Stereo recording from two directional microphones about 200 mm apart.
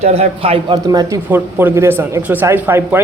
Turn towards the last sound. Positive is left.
turn(degrees=-10)  # may be behind; listen again after turning